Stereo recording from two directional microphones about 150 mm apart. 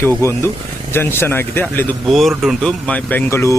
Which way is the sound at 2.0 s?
Centre (ahead or behind).